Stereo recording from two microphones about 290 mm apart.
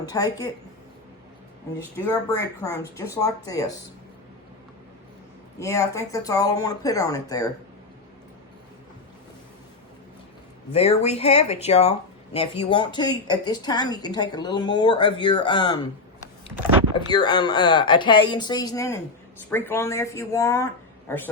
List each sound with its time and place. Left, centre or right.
0.0 s speech: centre
2.3 s speech: centre
5.5 s speech: centre
10.7 s speech: left
16.9 s speech: centre